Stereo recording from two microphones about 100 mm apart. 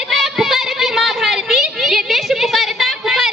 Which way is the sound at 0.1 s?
5° right (ahead or behind).